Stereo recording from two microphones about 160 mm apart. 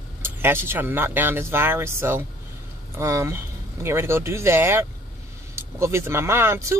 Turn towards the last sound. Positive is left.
turn(degrees=-15)  # may be behind; listen again after turning